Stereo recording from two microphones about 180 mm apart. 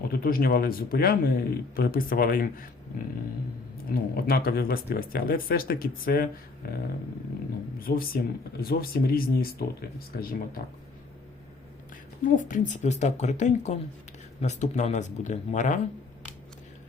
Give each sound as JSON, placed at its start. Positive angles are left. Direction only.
{"t": 0.0, "sound": "speech", "side_deg": 55}
{"t": 3.8, "sound": "speech", "side_deg": 55}
{"t": 12.2, "sound": "speech", "side_deg": 45}